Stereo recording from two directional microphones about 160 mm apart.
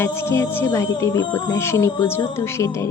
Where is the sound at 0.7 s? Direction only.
20° left (ahead or behind).